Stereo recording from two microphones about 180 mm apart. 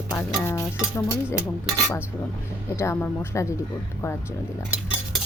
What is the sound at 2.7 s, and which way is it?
Speech, 15° left (ahead or behind).